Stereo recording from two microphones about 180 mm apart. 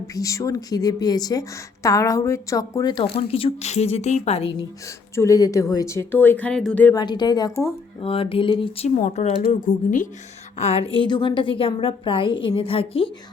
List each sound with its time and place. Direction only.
0.1 s a woman's voice: 20° left (ahead or behind); by 4.5 s 35° left (ahead or behind)
5.1 s speech: 15° left (ahead or behind)
6.9 s a woman's voice: 25° left (ahead or behind)
8.0 s a woman's voice: 30° left (ahead or behind)
9.0 s a woman's voice: 40° left (ahead or behind)